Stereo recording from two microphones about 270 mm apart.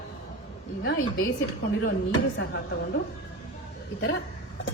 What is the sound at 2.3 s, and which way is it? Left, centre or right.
Speech, left.